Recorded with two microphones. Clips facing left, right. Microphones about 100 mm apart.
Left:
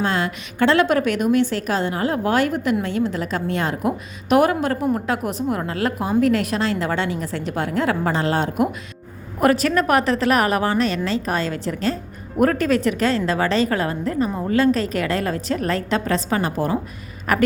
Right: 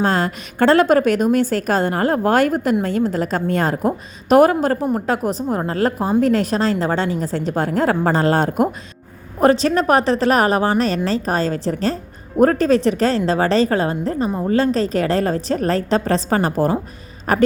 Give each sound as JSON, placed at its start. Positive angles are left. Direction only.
{"t": 0.0, "sound": "a woman's voice", "side_deg": -40}
{"t": 9.4, "sound": "a woman's voice", "side_deg": -30}